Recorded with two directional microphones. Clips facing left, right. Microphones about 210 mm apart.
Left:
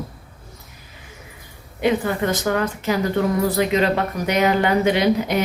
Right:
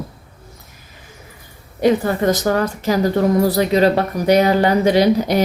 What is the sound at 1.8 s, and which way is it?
Speech, 40° right (ahead or behind).